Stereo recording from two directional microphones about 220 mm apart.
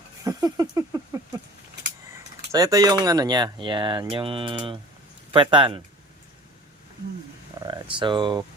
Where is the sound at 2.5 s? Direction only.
15° right (ahead or behind).